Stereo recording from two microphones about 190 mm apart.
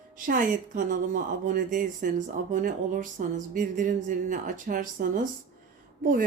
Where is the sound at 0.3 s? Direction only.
45° right (ahead or behind).